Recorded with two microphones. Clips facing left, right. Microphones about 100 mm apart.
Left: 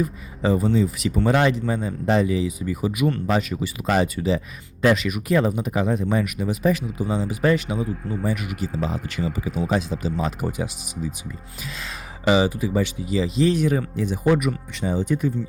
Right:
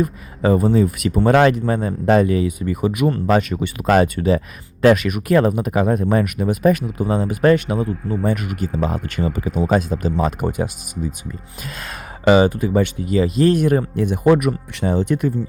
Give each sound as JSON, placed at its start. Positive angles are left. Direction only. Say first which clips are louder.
{"t": 0.0, "sound": "speech", "louder": "right 4 dB", "side_deg": -55}